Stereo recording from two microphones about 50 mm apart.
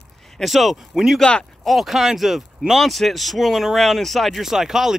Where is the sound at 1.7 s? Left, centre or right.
Centre.